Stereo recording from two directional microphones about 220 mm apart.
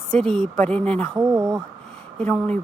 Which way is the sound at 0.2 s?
5° left (ahead or behind).